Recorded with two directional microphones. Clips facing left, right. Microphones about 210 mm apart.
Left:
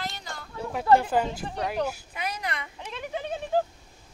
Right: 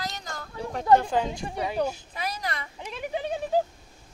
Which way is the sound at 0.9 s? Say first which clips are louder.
Even; 5° left (ahead or behind).